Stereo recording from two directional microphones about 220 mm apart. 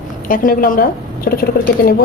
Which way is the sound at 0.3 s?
40° left (ahead or behind).